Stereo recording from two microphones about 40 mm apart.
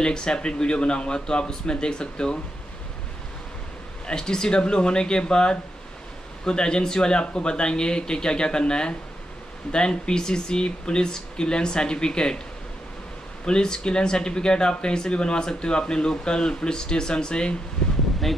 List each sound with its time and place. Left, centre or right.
0.0 s speech: centre
4.1 s speech: centre
13.5 s speech: left